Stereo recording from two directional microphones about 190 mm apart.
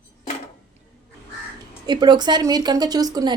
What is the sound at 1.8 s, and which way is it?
A woman's voice, 20° right (ahead or behind).